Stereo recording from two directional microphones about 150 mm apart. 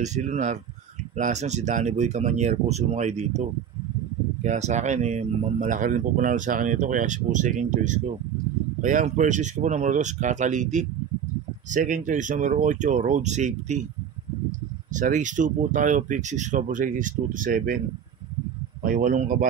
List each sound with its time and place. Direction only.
0.0 s speech: 50° right (ahead or behind)
14.9 s speech: 55° right (ahead or behind)
18.8 s speech: 70° right (ahead or behind)